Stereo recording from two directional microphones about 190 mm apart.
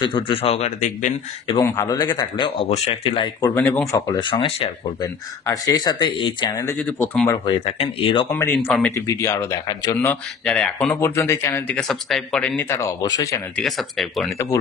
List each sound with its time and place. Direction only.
0.0 s speech: 25° left (ahead or behind)
1.6 s speech: 20° left (ahead or behind)
3.5 s speech: 10° left (ahead or behind)
4.1 s speech: 25° left (ahead or behind)
6.6 s speech: 10° left (ahead or behind)
7.4 s speech: 30° left (ahead or behind)
8.3 s speech: 10° left (ahead or behind)
9.9 s speech: 5° left (ahead or behind)
13.6 s speech: centre (ahead or behind)